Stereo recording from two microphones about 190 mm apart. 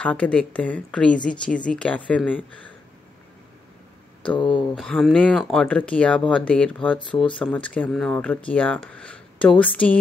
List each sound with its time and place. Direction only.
0.0 s speech: 5° left (ahead or behind)
4.4 s speech: 25° left (ahead or behind)
4.7 s speech: centre (ahead or behind)